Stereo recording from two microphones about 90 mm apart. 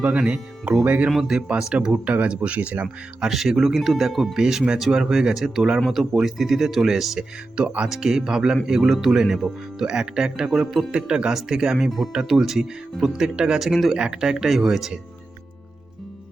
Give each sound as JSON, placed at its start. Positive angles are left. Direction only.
{"t": 0.0, "sound": "speech", "side_deg": -15}